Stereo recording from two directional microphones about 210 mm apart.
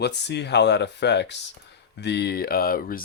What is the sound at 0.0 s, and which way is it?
Speech, 55° left (ahead or behind).